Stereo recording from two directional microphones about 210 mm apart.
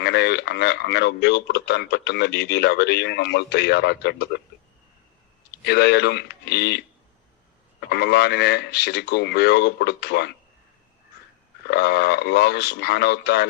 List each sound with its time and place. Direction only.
0.0 s speech: 55° left (ahead or behind)
5.6 s speech: 55° left (ahead or behind)
11.7 s speech: 50° left (ahead or behind)